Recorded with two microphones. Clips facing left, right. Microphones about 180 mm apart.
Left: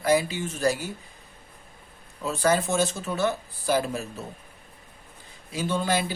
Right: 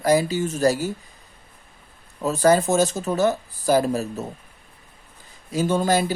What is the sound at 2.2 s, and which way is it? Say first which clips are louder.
Speech: right 6 dB; 40° right (ahead or behind).